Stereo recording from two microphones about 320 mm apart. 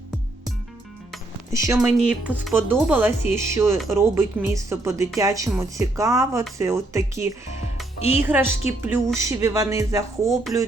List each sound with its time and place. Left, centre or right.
1.1 s speech: centre
7.9 s speech: centre
8.2 s speech: centre